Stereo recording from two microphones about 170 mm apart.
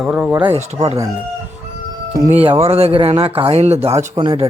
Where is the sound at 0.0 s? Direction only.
5° right (ahead or behind).